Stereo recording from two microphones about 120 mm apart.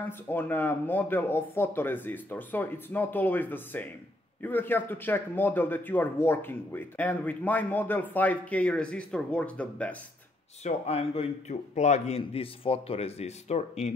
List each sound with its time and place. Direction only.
0.3 s speech: 15° left (ahead or behind)
10.6 s a man's voice: 55° left (ahead or behind); by 12.2 s 75° left (ahead or behind)
12.2 s speech: 50° left (ahead or behind); by 13.9 s 65° left (ahead or behind)